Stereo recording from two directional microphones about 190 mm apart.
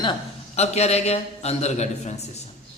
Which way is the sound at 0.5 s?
35° left (ahead or behind).